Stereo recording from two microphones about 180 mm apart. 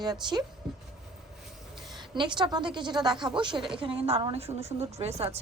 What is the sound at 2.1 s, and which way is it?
A woman's voice, 25° right (ahead or behind).